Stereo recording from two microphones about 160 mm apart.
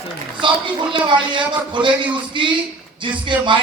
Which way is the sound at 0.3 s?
30° right (ahead or behind).